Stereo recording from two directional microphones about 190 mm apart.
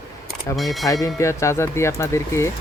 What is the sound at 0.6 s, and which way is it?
Speech, centre (ahead or behind).